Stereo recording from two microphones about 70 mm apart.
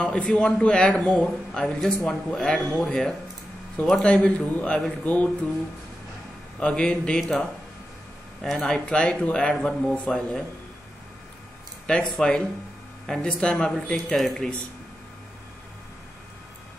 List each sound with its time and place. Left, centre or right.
0.0 s speech: centre
1.1 s speech: centre; by 5.3 s left
6.6 s speech: centre
7.2 s speech: centre
11.9 s speech: centre
13.9 s speech: centre